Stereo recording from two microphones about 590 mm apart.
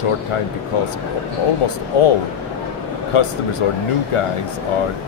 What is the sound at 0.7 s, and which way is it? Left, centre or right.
Speech, left.